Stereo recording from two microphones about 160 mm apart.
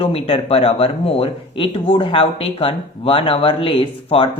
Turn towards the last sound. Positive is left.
turn(degrees=35)  # may be behind; listen again after turning